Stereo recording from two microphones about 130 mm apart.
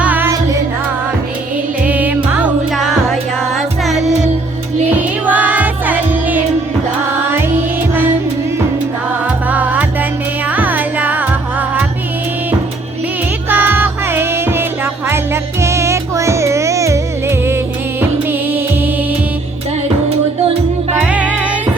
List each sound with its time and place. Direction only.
0.0 s music: 10° right (ahead or behind)
1.8 s music: 10° right (ahead or behind)
2.7 s music: centre (ahead or behind); by 7.4 s 15° right (ahead or behind)
9.5 s music: 10° right (ahead or behind)
13.5 s music: 15° right (ahead or behind)
20.9 s music: 10° right (ahead or behind)